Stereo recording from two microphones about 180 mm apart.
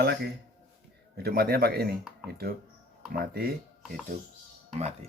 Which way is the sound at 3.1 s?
55° right (ahead or behind).